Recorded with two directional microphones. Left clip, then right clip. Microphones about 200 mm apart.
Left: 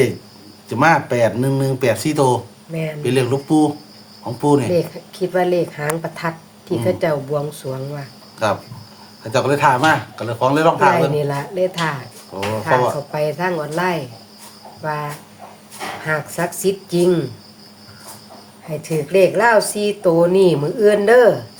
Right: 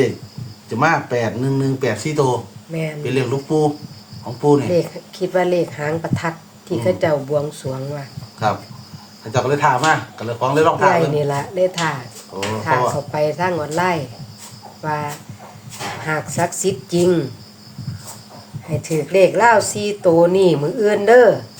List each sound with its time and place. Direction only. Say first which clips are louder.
0.7 s speech: left 2 dB; 60° left (ahead or behind)
4.7 s speech: even; 10° right (ahead or behind)
9.3 s speech: left 1 dB; 60° left (ahead or behind)
11.1 s speech: right 1 dB; 10° right (ahead or behind)
18.8 s speech: right 1 dB; 10° right (ahead or behind)